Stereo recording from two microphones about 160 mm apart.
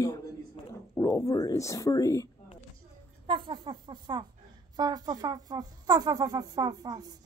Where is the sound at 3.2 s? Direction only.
35° right (ahead or behind).